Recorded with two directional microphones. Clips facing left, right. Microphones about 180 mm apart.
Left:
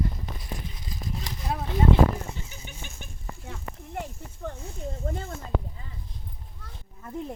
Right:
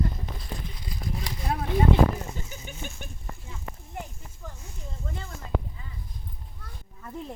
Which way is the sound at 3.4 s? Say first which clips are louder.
Left 3 dB; 65° left (ahead or behind).